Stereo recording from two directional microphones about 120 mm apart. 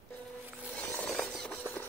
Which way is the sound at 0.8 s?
5° left (ahead or behind).